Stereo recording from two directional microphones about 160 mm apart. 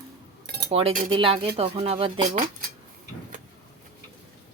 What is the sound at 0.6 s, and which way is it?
Cutlery, 35° right (ahead or behind).